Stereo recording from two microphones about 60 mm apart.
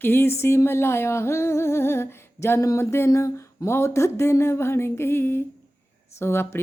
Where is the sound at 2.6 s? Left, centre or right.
Left.